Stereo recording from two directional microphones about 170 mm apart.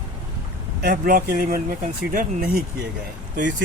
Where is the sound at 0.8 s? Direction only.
60° right (ahead or behind).